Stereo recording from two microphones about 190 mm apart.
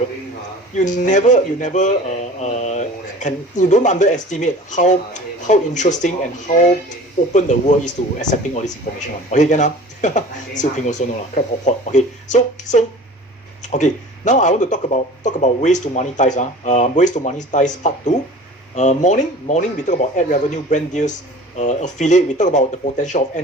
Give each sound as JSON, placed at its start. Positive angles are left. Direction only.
{"t": 0.8, "sound": "speech", "side_deg": 40}